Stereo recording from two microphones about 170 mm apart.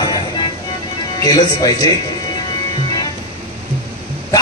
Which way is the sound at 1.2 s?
20° left (ahead or behind).